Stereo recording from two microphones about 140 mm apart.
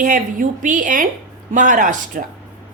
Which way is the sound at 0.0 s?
70° right (ahead or behind).